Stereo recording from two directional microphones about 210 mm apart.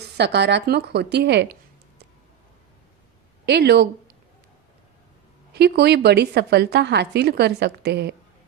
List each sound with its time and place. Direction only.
0.2 s a woman's voice: 55° right (ahead or behind)
3.4 s speech: 50° right (ahead or behind)
5.5 s a woman's voice: 50° right (ahead or behind)